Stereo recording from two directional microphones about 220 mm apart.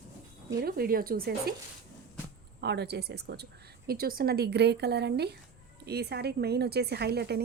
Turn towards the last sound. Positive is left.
turn(degrees=-45)  # may be behind; listen again after turning